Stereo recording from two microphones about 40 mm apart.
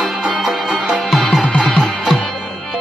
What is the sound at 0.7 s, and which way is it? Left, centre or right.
Music, right.